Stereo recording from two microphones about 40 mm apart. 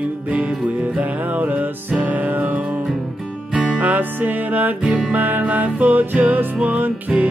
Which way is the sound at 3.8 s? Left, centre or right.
Right.